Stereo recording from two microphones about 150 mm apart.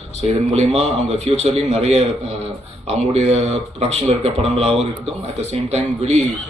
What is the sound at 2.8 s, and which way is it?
Speech, 45° right (ahead or behind).